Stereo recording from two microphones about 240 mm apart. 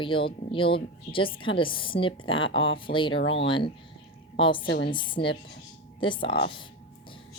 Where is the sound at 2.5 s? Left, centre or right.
Left.